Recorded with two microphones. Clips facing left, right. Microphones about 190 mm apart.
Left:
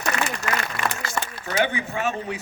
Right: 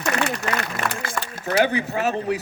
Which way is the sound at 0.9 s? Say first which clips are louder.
Even; 65° right (ahead or behind).